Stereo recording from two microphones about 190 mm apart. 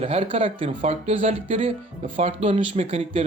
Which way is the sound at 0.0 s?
30° right (ahead or behind).